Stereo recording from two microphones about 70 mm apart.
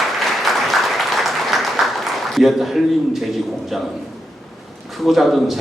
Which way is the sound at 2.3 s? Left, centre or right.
Centre.